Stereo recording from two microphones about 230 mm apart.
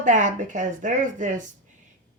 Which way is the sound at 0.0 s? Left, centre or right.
Right.